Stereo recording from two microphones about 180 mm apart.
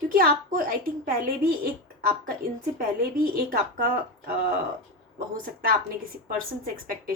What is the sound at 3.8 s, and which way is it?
Speech, 55° right (ahead or behind).